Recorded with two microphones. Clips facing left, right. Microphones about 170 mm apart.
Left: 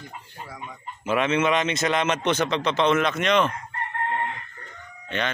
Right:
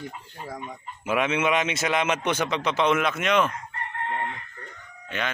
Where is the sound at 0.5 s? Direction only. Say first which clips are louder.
Right 5 dB; 45° right (ahead or behind).